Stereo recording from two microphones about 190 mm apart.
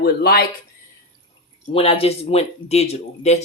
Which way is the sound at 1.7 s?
30° left (ahead or behind).